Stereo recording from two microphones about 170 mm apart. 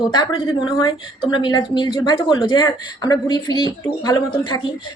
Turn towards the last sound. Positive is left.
turn(degrees=25)  # may be behind; listen again after turning